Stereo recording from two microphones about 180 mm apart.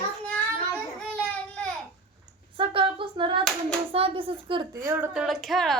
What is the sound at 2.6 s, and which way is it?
Hands, 30° right (ahead or behind).